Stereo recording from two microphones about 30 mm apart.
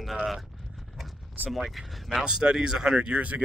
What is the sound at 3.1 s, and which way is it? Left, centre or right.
Speech, right.